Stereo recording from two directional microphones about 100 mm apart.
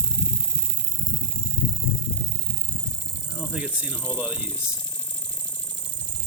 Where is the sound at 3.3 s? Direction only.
10° right (ahead or behind).